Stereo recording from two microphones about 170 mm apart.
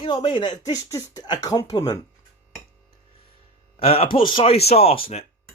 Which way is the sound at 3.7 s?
35° left (ahead or behind).